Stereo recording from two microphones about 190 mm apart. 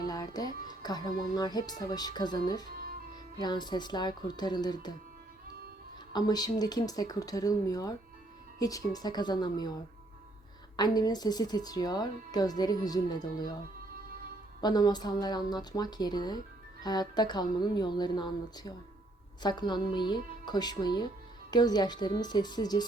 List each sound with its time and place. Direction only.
0.0 s music: 20° left (ahead or behind)
3.3 s speech: 20° left (ahead or behind)
6.1 s speech: 20° left (ahead or behind)
14.6 s speech: 20° left (ahead or behind)